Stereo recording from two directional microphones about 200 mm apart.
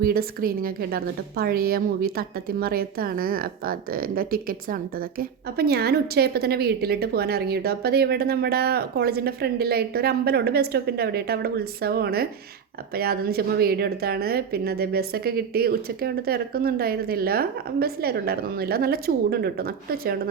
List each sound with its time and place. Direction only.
0.0 s a woman's voice: 45° right (ahead or behind)